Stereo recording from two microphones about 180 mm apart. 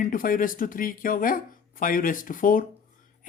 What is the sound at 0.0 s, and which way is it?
Speech, 50° left (ahead or behind).